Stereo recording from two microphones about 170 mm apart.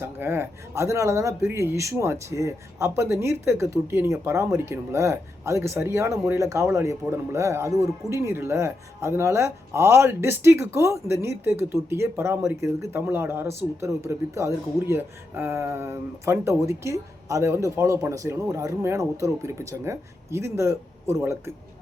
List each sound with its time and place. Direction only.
0.0 s speech: 15° right (ahead or behind)